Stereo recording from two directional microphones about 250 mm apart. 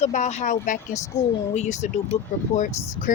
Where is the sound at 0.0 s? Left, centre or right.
Left.